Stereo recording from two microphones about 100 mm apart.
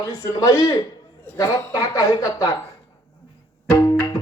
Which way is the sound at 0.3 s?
35° left (ahead or behind).